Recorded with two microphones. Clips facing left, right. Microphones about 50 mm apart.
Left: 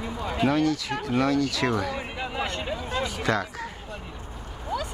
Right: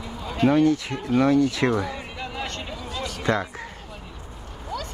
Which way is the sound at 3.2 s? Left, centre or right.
Right.